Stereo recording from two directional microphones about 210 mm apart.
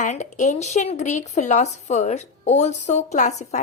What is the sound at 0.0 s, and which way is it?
Speech, 35° left (ahead or behind).